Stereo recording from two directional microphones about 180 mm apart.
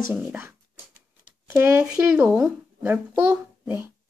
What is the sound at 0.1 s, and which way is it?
Speech, 10° right (ahead or behind).